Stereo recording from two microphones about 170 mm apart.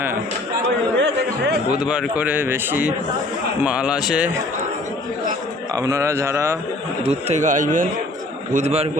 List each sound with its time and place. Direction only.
0.9 s speech: 90° right
1.8 s a man's voice: 5° right (ahead or behind)
5.7 s a man's voice: 20° right (ahead or behind)
7.0 s a man's voice: 40° right (ahead or behind)
8.5 s a man's voice: 40° right (ahead or behind)